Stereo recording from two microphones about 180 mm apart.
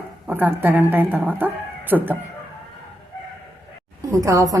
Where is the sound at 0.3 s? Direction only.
10° right (ahead or behind).